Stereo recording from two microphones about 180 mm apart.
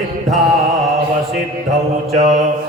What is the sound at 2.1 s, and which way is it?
Mantra, 40° right (ahead or behind).